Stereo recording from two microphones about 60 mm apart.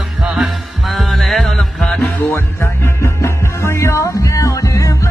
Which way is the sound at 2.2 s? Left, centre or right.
Left.